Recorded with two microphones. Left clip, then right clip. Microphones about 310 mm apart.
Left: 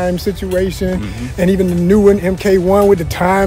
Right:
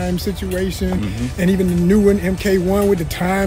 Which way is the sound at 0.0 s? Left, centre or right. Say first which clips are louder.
Left 6 dB; centre.